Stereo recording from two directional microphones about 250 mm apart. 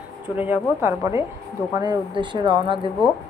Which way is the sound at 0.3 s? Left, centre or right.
Centre.